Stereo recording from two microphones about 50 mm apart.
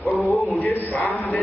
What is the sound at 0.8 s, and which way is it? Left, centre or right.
Speech, left.